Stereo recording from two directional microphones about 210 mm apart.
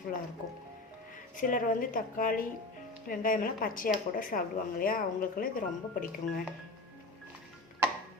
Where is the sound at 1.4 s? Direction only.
40° left (ahead or behind).